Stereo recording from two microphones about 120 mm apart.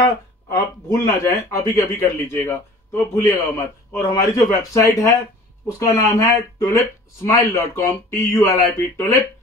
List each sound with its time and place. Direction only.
0.0 s speech: 30° left (ahead or behind)
2.4 s speech: 15° left (ahead or behind)